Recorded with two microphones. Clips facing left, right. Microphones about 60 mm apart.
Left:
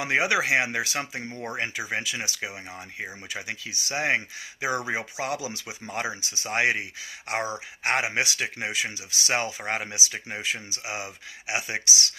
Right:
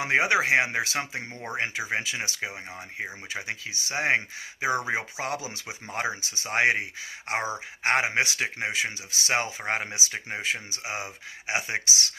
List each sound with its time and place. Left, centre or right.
0.0 s speech: right
7.3 s speech: right
7.9 s speech: right